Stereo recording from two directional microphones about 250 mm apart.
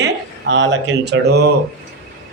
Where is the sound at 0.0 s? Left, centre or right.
Right.